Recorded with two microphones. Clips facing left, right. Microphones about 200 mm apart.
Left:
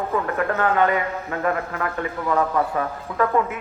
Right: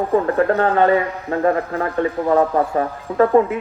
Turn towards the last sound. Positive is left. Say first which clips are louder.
# right 7 dB
turn(degrees=-35)  # may be behind; listen again after turning